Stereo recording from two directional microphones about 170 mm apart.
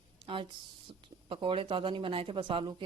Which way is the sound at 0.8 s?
30° right (ahead or behind).